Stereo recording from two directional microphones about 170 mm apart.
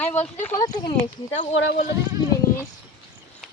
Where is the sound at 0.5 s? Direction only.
20° left (ahead or behind).